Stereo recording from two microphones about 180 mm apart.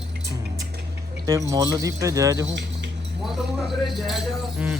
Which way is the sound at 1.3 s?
20° right (ahead or behind).